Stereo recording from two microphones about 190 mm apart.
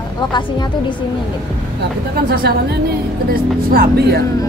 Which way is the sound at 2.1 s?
55° right (ahead or behind).